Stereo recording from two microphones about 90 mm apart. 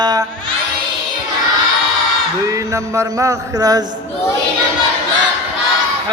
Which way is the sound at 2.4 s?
35° right (ahead or behind).